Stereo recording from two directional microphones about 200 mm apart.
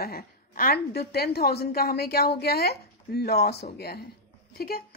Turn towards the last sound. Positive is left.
turn(degrees=50)  # may be behind; listen again after turning